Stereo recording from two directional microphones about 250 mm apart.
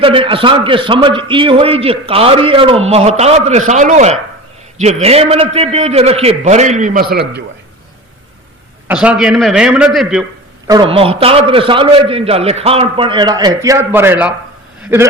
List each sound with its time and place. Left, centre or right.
0.0 s a man's voice: right
8.9 s a man's voice: centre
10.7 s a man's voice: centre